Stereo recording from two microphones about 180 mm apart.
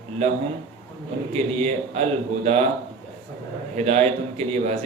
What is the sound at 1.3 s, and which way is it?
A man's voice, 35° right (ahead or behind).